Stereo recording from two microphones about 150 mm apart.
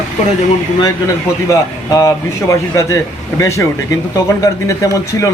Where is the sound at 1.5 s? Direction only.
20° left (ahead or behind).